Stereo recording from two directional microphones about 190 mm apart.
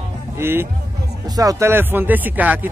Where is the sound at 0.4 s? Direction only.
10° right (ahead or behind).